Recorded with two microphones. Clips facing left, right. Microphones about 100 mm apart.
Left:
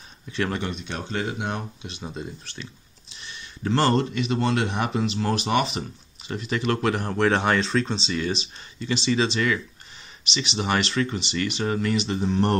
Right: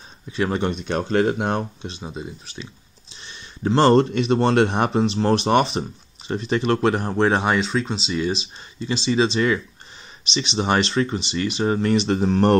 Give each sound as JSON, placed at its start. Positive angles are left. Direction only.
{"t": 0.3, "sound": "speech", "side_deg": -20}
{"t": 0.7, "sound": "speech", "side_deg": -40}
{"t": 1.9, "sound": "speech", "side_deg": -20}
{"t": 4.0, "sound": "speech", "side_deg": -40}
{"t": 7.5, "sound": "speech", "side_deg": -10}
{"t": 8.1, "sound": "speech", "side_deg": -20}
{"t": 11.9, "sound": "speech", "side_deg": -45}